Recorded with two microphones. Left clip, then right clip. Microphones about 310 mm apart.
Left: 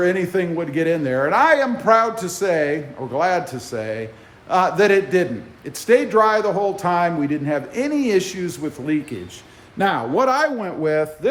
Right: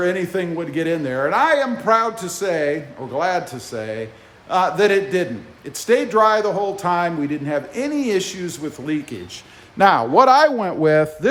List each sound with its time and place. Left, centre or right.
0.0 s a man's voice: centre
9.7 s a man's voice: right